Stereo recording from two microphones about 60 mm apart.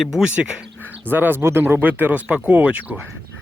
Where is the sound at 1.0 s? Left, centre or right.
Right.